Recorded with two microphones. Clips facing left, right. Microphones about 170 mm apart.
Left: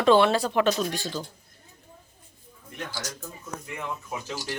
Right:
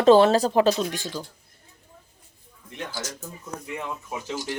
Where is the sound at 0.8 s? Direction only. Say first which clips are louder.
Even; 15° right (ahead or behind).